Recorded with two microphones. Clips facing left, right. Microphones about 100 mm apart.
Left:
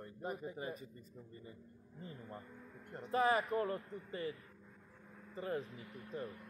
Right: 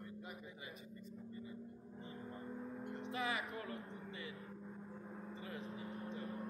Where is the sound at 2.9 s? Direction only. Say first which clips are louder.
Left 9 dB; 40° left (ahead or behind).